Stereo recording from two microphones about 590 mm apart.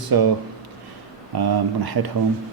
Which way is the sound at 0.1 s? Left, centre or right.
Right.